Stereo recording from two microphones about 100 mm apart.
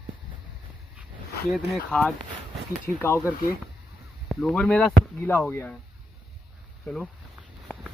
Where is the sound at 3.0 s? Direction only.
20° left (ahead or behind).